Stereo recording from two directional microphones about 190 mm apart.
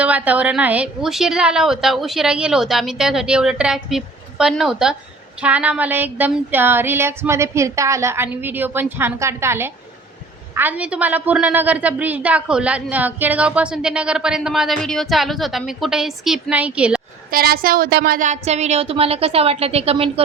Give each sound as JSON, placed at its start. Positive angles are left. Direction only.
{"t": 0.0, "sound": "a woman's voice", "side_deg": -5}
{"t": 5.4, "sound": "a sound", "side_deg": -5}
{"t": 10.5, "sound": "a woman's voice", "side_deg": -10}
{"t": 17.3, "sound": "a woman's voice", "side_deg": -50}
{"t": 18.3, "sound": "a woman's voice", "side_deg": -35}